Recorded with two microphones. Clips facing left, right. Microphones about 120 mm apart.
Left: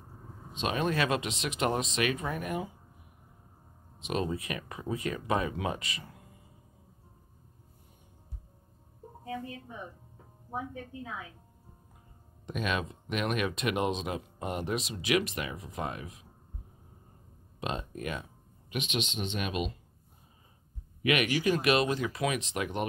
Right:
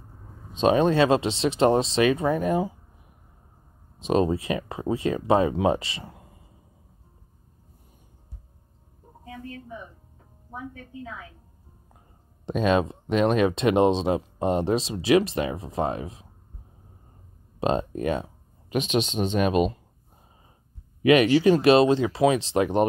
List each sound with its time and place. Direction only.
0.5 s speech: 35° right (ahead or behind)
4.0 s speech: 35° right (ahead or behind)
12.4 s speech: 30° right (ahead or behind)
17.6 s speech: 35° right (ahead or behind)
21.0 s speech: 30° right (ahead or behind)